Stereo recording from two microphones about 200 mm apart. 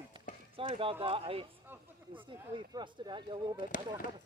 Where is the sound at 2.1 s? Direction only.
25° right (ahead or behind).